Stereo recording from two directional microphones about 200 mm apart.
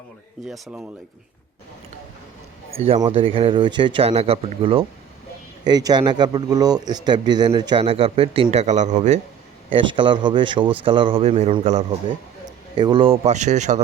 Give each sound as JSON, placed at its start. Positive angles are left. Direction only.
{"t": 0.4, "sound": "speech", "side_deg": 0}
{"t": 2.7, "sound": "a man's voice", "side_deg": -30}
{"t": 9.6, "sound": "a man's voice", "side_deg": -25}
{"t": 12.5, "sound": "a man's voice", "side_deg": -20}